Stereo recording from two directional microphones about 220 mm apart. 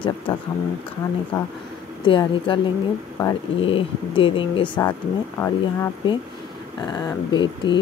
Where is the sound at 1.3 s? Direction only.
15° left (ahead or behind).